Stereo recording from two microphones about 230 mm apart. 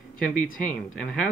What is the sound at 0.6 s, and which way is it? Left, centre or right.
Speech, centre.